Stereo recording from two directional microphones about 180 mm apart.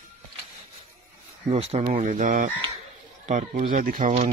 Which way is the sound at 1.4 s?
35° right (ahead or behind).